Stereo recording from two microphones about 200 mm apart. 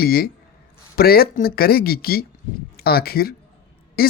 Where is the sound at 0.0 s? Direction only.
50° left (ahead or behind).